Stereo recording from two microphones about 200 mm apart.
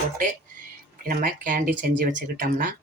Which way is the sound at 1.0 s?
45° right (ahead or behind).